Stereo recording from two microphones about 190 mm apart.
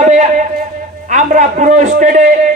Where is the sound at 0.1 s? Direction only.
40° right (ahead or behind).